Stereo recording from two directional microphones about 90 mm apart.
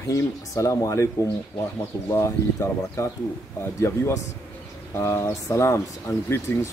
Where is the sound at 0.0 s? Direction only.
35° left (ahead or behind).